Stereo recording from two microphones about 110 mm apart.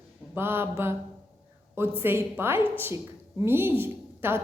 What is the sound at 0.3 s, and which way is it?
A woman's voice, 20° right (ahead or behind).